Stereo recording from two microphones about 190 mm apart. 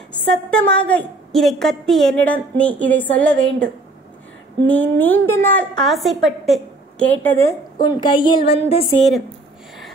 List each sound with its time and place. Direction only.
0.2 s a woman's voice: 5° left (ahead or behind)
4.6 s a woman's voice: 10° left (ahead or behind)
7.8 s a woman's voice: 25° left (ahead or behind)
8.5 s a sound: 30° left (ahead or behind)